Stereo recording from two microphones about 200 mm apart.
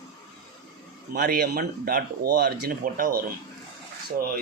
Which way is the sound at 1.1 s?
50° right (ahead or behind).